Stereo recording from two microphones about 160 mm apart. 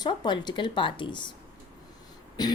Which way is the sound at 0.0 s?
25° left (ahead or behind).